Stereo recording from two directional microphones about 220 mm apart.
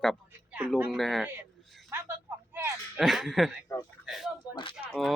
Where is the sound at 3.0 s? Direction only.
Centre (ahead or behind).